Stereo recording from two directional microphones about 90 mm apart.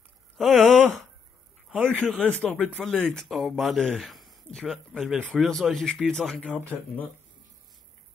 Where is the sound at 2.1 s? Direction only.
15° left (ahead or behind).